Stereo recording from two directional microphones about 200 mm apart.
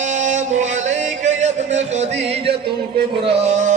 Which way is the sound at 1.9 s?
30° right (ahead or behind).